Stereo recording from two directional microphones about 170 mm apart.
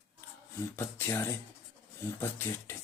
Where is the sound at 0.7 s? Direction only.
15° left (ahead or behind).